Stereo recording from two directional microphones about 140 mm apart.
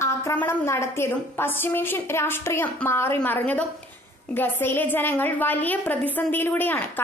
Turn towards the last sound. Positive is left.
turn(degrees=15)  # may be behind; listen again after turning